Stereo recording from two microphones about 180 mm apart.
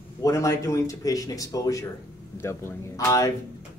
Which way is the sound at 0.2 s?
15° left (ahead or behind).